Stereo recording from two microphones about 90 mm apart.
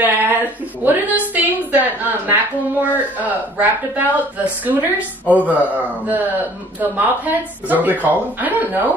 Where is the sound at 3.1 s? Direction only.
20° right (ahead or behind).